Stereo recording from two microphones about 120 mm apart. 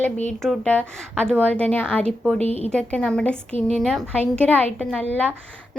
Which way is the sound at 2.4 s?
60° right (ahead or behind).